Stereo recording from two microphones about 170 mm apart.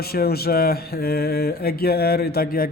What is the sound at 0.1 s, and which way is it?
Speech, 65° left (ahead or behind).